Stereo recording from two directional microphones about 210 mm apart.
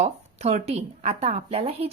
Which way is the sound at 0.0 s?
30° right (ahead or behind).